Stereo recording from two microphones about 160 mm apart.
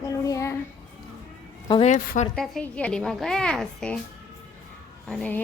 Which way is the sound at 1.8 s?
50° left (ahead or behind).